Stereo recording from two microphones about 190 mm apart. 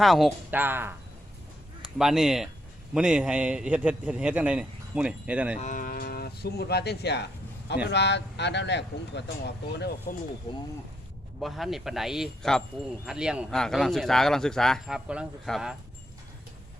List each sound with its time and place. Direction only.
0.0 s a man's voice: centre (ahead or behind)
5.5 s speech: 40° left (ahead or behind); by 10.2 s 60° left (ahead or behind)
10.5 s speech: 20° left (ahead or behind)
11.3 s a man's voice: centre (ahead or behind)